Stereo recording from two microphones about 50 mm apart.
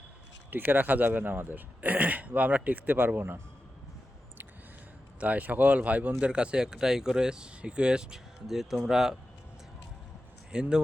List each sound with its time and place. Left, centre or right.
0.5 s a man's voice: right
5.2 s speech: right
6.1 s speech: right
8.4 s speech: centre
10.5 s speech: centre